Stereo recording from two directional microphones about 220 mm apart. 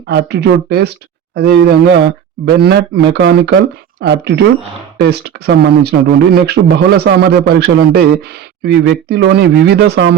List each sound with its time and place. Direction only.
0.1 s speech: 50° right (ahead or behind)